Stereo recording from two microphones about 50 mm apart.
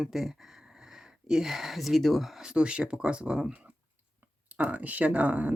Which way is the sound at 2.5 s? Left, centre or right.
Right.